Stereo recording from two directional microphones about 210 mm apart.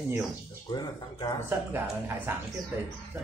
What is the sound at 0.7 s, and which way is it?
Speech, 20° left (ahead or behind).